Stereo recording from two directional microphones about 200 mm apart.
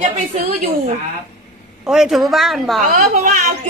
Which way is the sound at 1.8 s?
5° right (ahead or behind).